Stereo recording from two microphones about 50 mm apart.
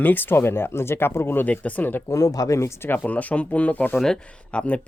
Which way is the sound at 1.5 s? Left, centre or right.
Left.